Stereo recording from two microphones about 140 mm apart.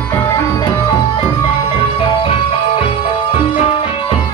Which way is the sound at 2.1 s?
40° left (ahead or behind).